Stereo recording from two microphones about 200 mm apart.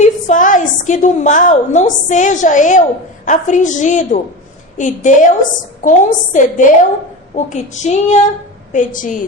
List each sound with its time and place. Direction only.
0.0 s a woman's voice: 40° left (ahead or behind)